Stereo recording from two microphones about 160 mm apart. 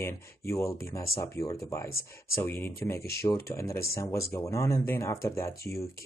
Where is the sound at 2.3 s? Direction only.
15° left (ahead or behind).